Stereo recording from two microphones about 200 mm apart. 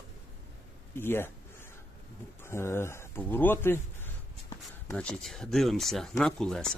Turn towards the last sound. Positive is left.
turn(degrees=5)  # may be behind; listen again after turning